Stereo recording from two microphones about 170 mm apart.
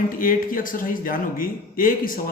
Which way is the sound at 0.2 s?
55° left (ahead or behind).